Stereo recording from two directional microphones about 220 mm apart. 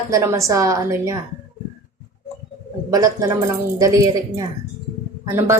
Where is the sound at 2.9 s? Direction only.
15° right (ahead or behind).